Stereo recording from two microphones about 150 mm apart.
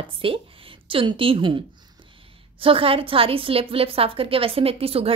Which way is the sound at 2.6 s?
40° right (ahead or behind).